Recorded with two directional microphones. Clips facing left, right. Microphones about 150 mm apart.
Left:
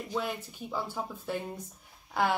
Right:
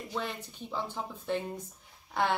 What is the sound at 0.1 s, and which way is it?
A woman's voice, 10° left (ahead or behind).